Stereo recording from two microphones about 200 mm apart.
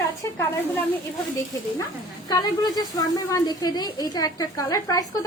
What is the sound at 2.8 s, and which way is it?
Speech, 20° left (ahead or behind).